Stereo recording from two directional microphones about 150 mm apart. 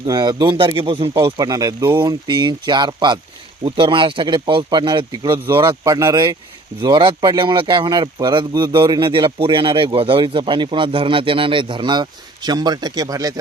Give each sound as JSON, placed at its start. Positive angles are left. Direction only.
{"t": 0.0, "sound": "speech", "side_deg": -30}